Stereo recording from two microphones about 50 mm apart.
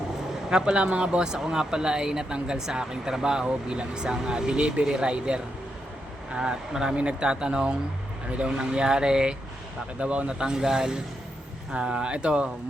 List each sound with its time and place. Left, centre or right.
0.5 s speech: centre